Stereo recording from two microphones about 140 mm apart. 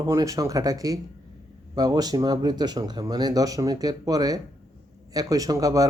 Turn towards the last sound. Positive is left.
turn(degrees=-25)  # may be behind; listen again after turning